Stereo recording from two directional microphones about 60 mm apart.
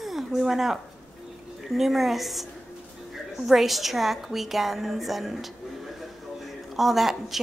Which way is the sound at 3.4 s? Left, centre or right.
Centre.